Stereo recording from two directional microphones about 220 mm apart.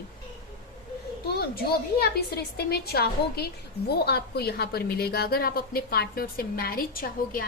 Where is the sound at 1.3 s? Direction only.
45° left (ahead or behind).